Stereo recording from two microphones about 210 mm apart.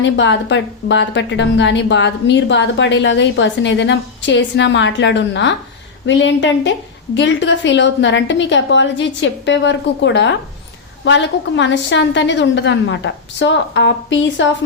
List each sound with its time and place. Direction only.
0.0 s a woman's voice: 60° left (ahead or behind)